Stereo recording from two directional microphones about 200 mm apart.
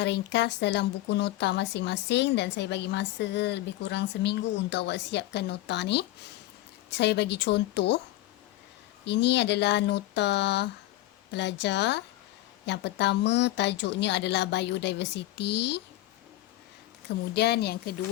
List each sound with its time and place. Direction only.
0.0 s speech: 60° left (ahead or behind)
9.0 s speech: 60° left (ahead or behind)
17.3 s a woman's voice: 55° left (ahead or behind)